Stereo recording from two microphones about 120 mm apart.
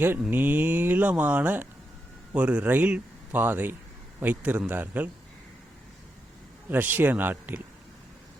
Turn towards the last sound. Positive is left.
turn(degrees=-15)  # may be behind; listen again after turning